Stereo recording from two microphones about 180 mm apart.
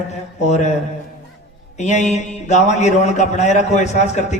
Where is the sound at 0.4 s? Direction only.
40° left (ahead or behind).